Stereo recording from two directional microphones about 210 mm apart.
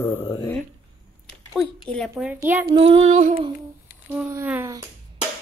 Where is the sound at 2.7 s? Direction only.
30° right (ahead or behind).